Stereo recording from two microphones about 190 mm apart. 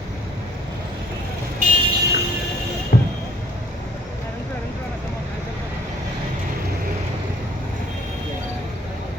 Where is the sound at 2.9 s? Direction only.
60° left (ahead or behind).